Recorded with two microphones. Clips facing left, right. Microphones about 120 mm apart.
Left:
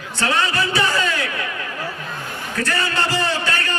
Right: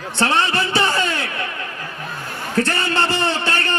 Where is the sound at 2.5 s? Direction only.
25° right (ahead or behind).